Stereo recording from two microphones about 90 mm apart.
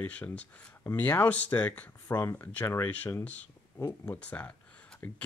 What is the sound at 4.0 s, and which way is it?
Speech, 15° left (ahead or behind).